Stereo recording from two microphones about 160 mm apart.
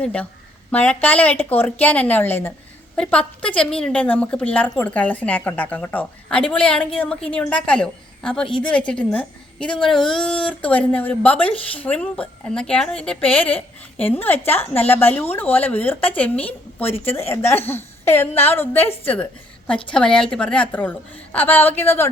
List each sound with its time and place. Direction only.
0.0 s a woman's voice: 5° left (ahead or behind)